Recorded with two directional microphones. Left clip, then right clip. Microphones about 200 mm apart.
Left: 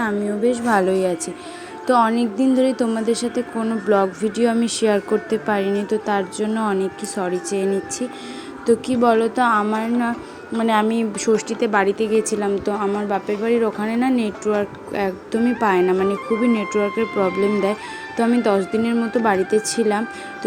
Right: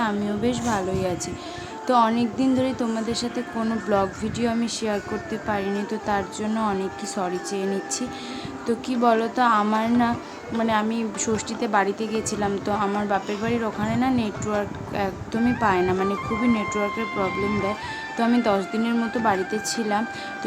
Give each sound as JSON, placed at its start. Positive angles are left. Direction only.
{"t": 0.0, "sound": "a woman's voice", "side_deg": 5}
{"t": 0.7, "sound": "a woman's voice", "side_deg": 25}
{"t": 3.6, "sound": "speech", "side_deg": 5}
{"t": 3.9, "sound": "a woman's voice", "side_deg": 15}
{"t": 9.6, "sound": "speech", "side_deg": 0}
{"t": 10.6, "sound": "a woman's voice", "side_deg": 20}
{"t": 11.3, "sound": "a woman's voice", "side_deg": 10}
{"t": 15.4, "sound": "speech", "side_deg": 5}
{"t": 16.7, "sound": "a woman's voice", "side_deg": 15}
{"t": 17.2, "sound": "a woman's voice", "side_deg": 0}